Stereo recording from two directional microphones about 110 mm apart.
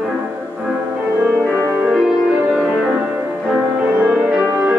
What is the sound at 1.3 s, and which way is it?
Music, 10° left (ahead or behind).